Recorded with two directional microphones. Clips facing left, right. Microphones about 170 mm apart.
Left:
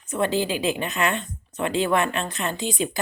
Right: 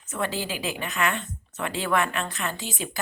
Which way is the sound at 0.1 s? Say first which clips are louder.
Left 6 dB; 20° left (ahead or behind).